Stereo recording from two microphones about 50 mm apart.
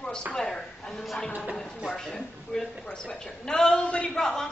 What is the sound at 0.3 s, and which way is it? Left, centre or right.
A woman's voice, centre.